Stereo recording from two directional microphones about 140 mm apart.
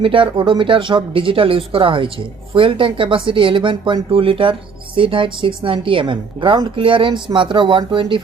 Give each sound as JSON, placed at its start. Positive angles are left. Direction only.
{"t": 0.0, "sound": "a woman's voice", "side_deg": -40}